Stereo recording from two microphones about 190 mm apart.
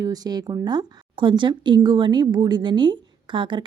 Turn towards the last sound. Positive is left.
turn(degrees=-25)  # may be behind; listen again after turning